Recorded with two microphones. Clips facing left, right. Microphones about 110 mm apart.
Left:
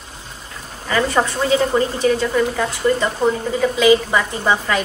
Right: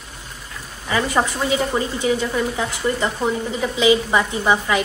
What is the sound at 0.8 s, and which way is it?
Speech, 10° right (ahead or behind).